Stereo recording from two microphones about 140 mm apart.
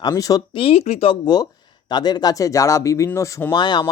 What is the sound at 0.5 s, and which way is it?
Speech, 45° left (ahead or behind).